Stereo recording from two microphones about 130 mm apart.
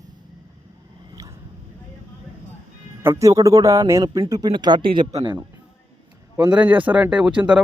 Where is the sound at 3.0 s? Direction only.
25° right (ahead or behind).